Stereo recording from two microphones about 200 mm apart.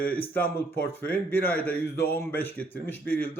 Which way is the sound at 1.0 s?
10° left (ahead or behind).